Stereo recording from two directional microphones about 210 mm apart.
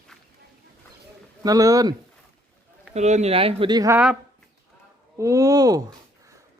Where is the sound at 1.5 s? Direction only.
15° right (ahead or behind).